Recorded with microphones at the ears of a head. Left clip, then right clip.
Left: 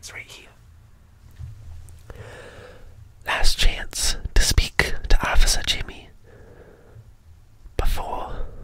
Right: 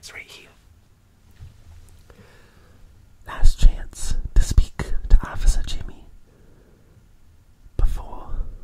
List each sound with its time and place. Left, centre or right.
0.0 s speech: centre
2.0 s whispering: left